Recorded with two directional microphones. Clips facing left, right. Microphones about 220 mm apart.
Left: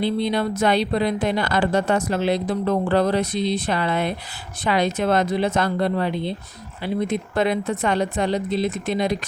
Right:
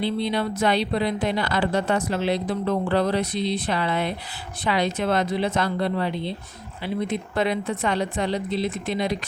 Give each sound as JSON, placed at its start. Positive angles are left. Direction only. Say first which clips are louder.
{"t": 0.0, "sound": "speech", "louder": "left 3 dB", "side_deg": 45}